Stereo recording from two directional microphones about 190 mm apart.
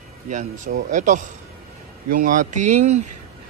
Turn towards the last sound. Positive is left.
turn(degrees=-40)  # may be behind; listen again after turning